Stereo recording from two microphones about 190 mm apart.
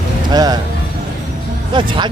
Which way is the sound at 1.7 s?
25° right (ahead or behind).